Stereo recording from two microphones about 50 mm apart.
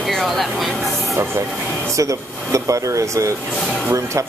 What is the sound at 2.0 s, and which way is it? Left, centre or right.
Speech, right.